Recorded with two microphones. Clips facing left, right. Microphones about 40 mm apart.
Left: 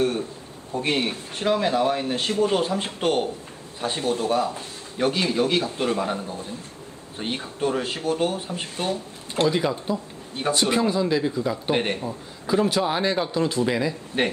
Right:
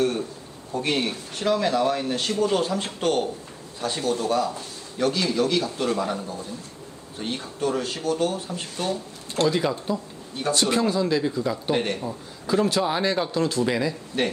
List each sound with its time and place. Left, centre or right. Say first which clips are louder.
0.0 s a sound: even; left
0.7 s a man's voice: left 1 dB; left
9.3 s a man's voice: even; centre
11.7 s a man's voice: left 1 dB; left
11.9 s a man's voice: even; centre
14.2 s a man's voice: left 1 dB; left